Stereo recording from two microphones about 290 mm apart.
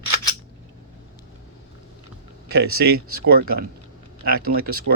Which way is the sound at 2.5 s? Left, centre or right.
Right.